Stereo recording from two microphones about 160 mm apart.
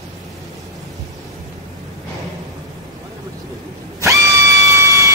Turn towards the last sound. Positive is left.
turn(degrees=-20)  # may be behind; listen again after turning